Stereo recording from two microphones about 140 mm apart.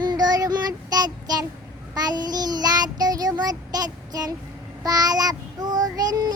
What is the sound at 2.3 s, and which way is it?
Child singing, 30° right (ahead or behind).